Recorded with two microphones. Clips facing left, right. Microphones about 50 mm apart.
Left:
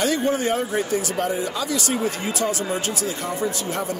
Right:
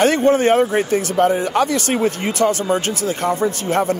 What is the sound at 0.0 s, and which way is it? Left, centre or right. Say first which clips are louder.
Speech: right 7 dB; right.